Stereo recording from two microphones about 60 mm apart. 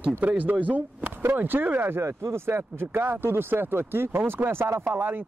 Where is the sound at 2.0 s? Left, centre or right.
Right.